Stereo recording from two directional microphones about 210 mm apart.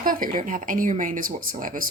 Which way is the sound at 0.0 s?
40° right (ahead or behind).